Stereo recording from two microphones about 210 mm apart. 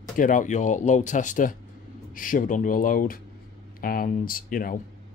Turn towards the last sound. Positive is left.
turn(degrees=40)  # may be behind; listen again after turning